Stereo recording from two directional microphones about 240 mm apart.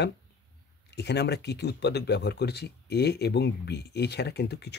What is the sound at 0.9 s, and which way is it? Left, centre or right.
Speech, left.